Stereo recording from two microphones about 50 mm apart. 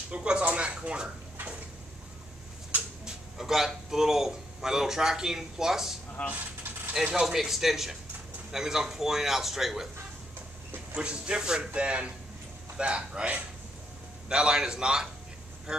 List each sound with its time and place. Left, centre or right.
0.1 s speech: right
0.5 s a sound: right
3.1 s a man's voice: centre
6.2 s speech: left
6.9 s a man's voice: centre
11.0 s a man's voice: right